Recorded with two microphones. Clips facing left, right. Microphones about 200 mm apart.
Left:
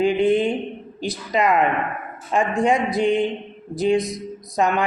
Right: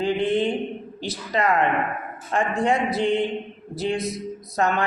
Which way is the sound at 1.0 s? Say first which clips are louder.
Left 3 dB; 15° left (ahead or behind).